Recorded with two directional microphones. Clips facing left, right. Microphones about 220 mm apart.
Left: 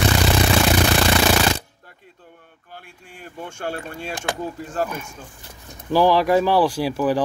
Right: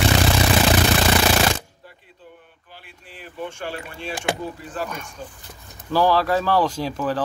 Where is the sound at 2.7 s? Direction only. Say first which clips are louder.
Left 2 dB; 50° left (ahead or behind).